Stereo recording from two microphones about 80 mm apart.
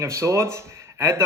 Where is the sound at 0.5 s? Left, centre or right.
Right.